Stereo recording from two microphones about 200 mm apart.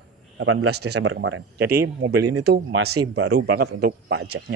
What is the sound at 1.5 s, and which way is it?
Speech, 55° right (ahead or behind).